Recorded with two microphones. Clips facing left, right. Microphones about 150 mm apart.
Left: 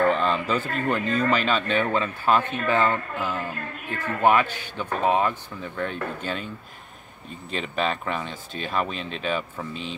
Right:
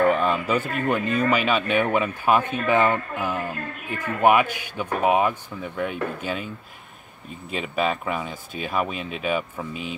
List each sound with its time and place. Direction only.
0.0 s speech: 10° right (ahead or behind)
7.5 s speech: 5° right (ahead or behind)